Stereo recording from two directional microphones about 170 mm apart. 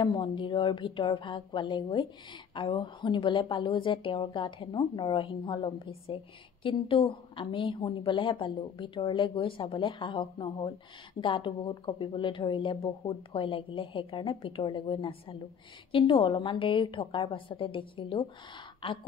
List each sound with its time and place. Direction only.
0.0 s a woman's voice: 25° left (ahead or behind)